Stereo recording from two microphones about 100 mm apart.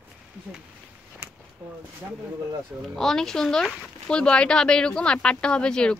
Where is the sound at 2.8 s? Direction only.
5° left (ahead or behind).